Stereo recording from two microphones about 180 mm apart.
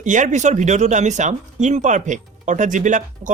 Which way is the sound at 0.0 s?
45° right (ahead or behind).